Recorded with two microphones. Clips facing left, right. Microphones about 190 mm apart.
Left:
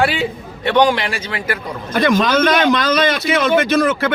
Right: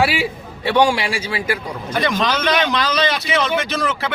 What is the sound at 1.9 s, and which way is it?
A man's voice, 50° left (ahead or behind).